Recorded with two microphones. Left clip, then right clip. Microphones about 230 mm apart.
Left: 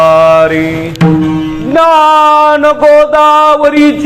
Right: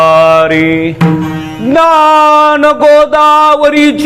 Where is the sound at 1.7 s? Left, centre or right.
Right.